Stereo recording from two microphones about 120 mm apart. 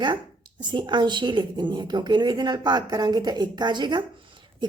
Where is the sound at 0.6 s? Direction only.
40° right (ahead or behind).